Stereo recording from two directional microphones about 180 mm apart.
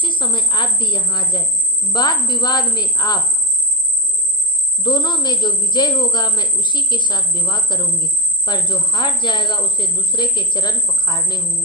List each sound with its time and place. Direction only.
0.0 s speech: 25° left (ahead or behind)
4.8 s speech: 25° left (ahead or behind)